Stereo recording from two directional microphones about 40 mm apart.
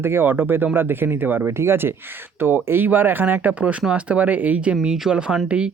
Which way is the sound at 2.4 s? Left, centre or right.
Right.